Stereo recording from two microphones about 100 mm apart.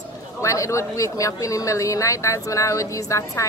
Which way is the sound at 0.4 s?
30° left (ahead or behind).